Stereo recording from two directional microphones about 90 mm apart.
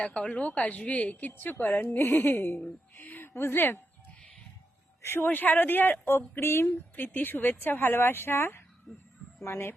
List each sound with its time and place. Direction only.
0.0 s a woman's voice: 15° left (ahead or behind)
2.9 s a sound: 20° left (ahead or behind)
5.0 s a woman's voice: 25° left (ahead or behind)